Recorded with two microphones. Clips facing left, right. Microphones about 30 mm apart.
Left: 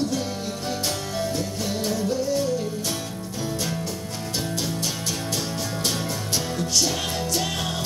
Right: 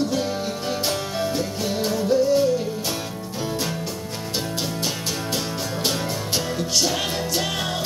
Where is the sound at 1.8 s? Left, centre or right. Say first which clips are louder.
Right 6 dB; centre.